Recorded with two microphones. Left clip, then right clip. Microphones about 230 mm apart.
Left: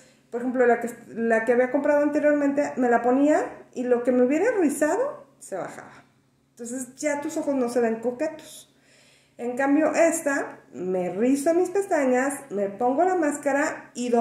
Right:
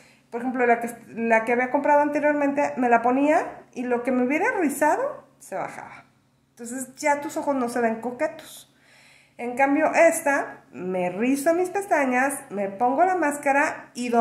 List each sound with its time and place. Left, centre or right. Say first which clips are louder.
0.3 s a woman's voice: even; right